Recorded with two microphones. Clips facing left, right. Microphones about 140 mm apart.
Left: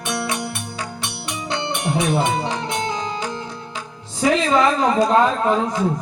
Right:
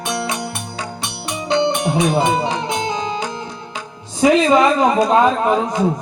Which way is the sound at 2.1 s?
15° right (ahead or behind).